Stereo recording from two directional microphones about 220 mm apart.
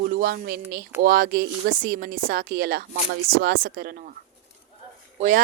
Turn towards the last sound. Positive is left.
turn(degrees=-35)  # may be behind; listen again after turning